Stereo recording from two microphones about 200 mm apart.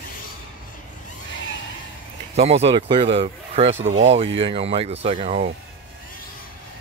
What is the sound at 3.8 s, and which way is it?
Speech, 75° right (ahead or behind).